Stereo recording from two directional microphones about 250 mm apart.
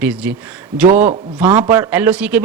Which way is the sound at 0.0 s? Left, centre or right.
Centre.